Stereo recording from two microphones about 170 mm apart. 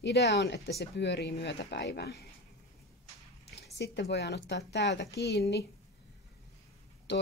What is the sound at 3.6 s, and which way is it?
A woman's voice, 80° left.